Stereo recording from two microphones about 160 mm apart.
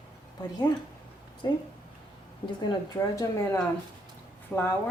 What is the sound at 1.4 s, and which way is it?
A man's voice, 25° left (ahead or behind).